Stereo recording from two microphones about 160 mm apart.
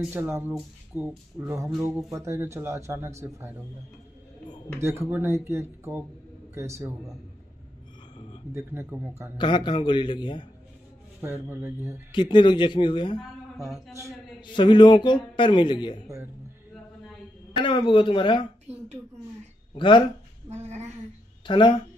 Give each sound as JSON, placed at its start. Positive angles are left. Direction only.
{"t": 0.1, "sound": "a man's voice", "side_deg": -15}
{"t": 4.7, "sound": "a man's voice", "side_deg": -15}
{"t": 8.5, "sound": "a man's voice", "side_deg": -15}
{"t": 9.4, "sound": "a man's voice", "side_deg": 30}
{"t": 11.1, "sound": "a man's voice", "side_deg": -15}
{"t": 12.1, "sound": "a man's voice", "side_deg": 30}
{"t": 13.6, "sound": "a man's voice", "side_deg": 0}
{"t": 14.4, "sound": "a man's voice", "side_deg": 30}
{"t": 17.6, "sound": "speech", "side_deg": 30}
{"t": 19.7, "sound": "speech", "side_deg": 30}
{"t": 20.4, "sound": "a woman's voice", "side_deg": -45}
{"t": 21.5, "sound": "speech", "side_deg": 30}